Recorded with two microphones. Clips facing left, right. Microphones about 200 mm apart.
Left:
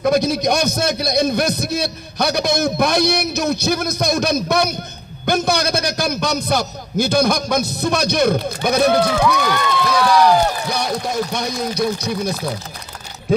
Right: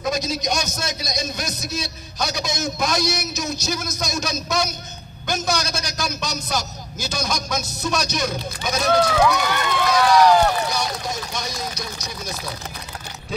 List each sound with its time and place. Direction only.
0.0 s a man's voice: 60° left (ahead or behind)